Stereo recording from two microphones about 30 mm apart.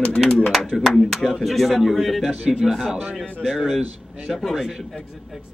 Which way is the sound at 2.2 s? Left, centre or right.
Right.